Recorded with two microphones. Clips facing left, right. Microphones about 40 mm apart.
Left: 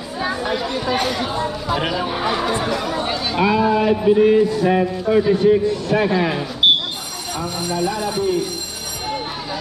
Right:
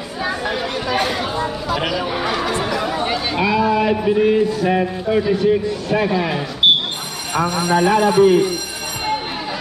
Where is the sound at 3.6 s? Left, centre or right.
Right.